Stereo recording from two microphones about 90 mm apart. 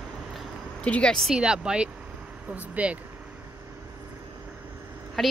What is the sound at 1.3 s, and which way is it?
Speech, 10° right (ahead or behind).